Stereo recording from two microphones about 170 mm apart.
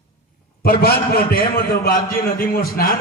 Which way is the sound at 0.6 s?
65° left (ahead or behind).